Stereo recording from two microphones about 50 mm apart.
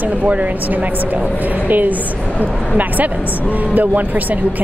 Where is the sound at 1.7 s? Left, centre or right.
Right.